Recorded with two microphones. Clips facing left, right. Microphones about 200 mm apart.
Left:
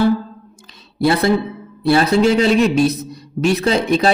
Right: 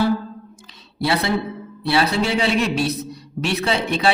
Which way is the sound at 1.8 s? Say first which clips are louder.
Left 6 dB; 45° left (ahead or behind).